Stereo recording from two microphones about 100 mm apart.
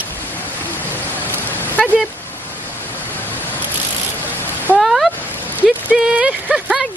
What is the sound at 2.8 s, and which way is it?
Vehicle, 20° left (ahead or behind).